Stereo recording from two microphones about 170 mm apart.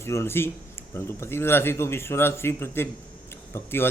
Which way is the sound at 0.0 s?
15° left (ahead or behind).